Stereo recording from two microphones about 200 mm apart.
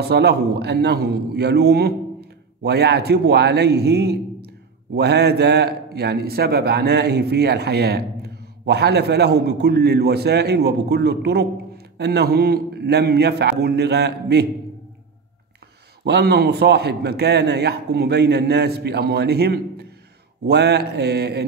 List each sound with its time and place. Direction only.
0.0 s a man's voice: 55° right (ahead or behind)
16.0 s a man's voice: 55° right (ahead or behind)